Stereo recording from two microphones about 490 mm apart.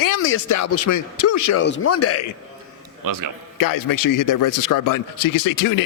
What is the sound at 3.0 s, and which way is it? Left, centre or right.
Speech, right.